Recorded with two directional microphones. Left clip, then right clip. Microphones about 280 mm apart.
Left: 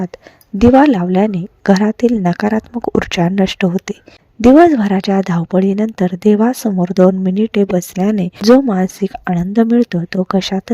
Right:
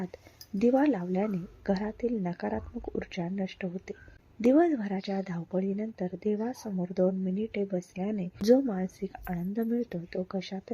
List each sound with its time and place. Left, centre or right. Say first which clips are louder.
0.6 s speech: left 16 dB; left